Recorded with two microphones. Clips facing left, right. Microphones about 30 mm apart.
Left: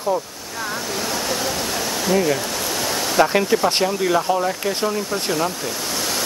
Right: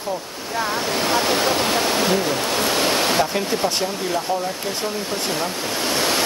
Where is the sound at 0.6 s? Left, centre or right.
Right.